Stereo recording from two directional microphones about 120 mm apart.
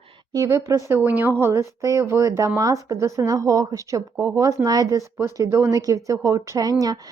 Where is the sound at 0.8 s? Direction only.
15° right (ahead or behind).